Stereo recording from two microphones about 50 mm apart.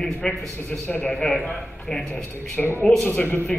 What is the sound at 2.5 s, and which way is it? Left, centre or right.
Speech, left.